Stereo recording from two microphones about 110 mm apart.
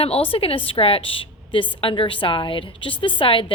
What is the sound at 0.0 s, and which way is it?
A woman's voice, 60° left (ahead or behind).